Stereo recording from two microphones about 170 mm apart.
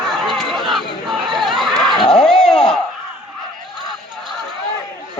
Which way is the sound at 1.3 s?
Centre (ahead or behind).